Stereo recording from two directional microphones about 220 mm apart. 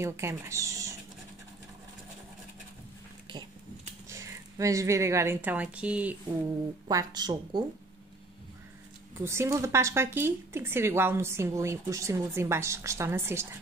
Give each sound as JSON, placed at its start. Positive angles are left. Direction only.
{"t": 0.0, "sound": "speech", "side_deg": -10}
{"t": 3.3, "sound": "a sound", "side_deg": -20}
{"t": 6.9, "sound": "speech", "side_deg": -15}
{"t": 9.2, "sound": "speech", "side_deg": -10}